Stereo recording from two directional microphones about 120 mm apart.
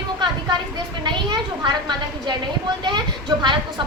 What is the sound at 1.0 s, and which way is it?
A woman's voice, 40° right (ahead or behind).